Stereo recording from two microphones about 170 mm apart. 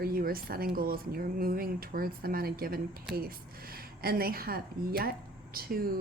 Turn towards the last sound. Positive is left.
turn(degrees=-60)  # may be behind; listen again after turning